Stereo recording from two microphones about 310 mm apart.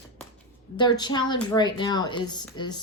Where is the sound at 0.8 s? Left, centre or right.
Centre.